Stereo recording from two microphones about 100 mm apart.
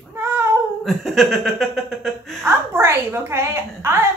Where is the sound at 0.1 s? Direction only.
25° right (ahead or behind).